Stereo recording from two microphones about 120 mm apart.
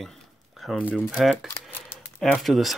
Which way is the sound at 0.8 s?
5° right (ahead or behind).